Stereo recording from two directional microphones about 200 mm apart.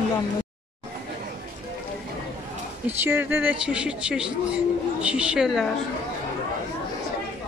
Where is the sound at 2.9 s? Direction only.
10° right (ahead or behind).